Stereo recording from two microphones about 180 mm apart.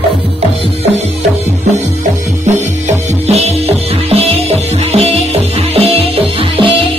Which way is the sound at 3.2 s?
35° right (ahead or behind).